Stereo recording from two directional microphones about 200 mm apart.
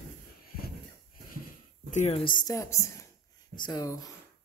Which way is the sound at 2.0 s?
30° left (ahead or behind).